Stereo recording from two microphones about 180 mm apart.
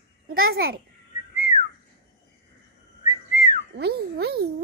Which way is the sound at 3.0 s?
45° left (ahead or behind).